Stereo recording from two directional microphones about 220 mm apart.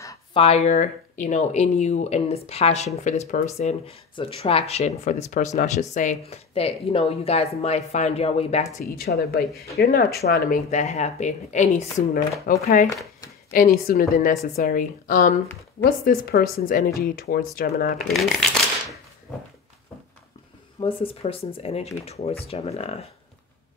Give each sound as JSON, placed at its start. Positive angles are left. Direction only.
{"t": 0.0, "sound": "a sound", "side_deg": 15}
{"t": 0.4, "sound": "speech", "side_deg": 30}
{"t": 8.7, "sound": "a woman's voice", "side_deg": 45}
{"t": 17.9, "sound": "speech", "side_deg": 0}
{"t": 19.3, "sound": "a sound", "side_deg": 5}
{"t": 20.8, "sound": "speech", "side_deg": 25}